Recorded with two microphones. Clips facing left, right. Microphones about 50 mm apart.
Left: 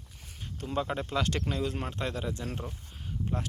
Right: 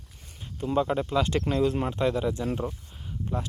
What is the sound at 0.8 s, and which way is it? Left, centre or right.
Speech, centre.